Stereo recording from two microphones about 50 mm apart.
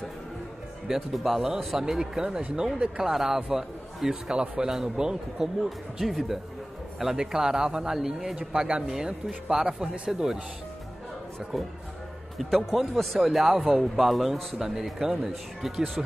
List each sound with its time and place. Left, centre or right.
0.8 s speech: centre
8.4 s speech: right
8.8 s speech: centre
11.5 s speech: centre